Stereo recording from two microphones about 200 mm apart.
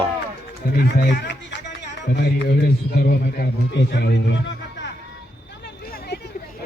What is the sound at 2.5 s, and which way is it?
A man's voice, 50° left (ahead or behind).